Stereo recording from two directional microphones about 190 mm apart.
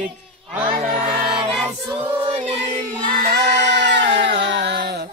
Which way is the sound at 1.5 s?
5° right (ahead or behind).